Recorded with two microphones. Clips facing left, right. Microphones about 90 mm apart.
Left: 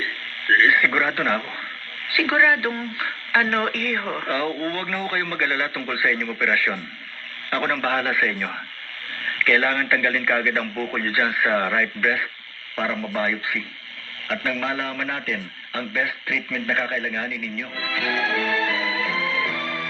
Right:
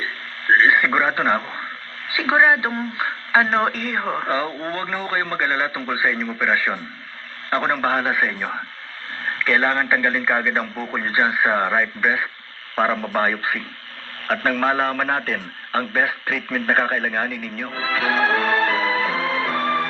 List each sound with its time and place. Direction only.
0.0 s radio: 25° right (ahead or behind)
2.0 s speech: 25° right (ahead or behind)
12.7 s a man's voice: 40° right (ahead or behind)